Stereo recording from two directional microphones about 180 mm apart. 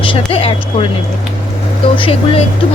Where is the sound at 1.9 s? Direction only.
30° left (ahead or behind).